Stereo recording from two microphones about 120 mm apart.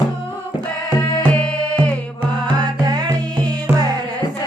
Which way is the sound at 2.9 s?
35° right (ahead or behind).